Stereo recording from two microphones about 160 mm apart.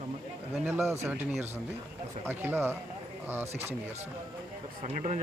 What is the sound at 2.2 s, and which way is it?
Speech, 15° right (ahead or behind).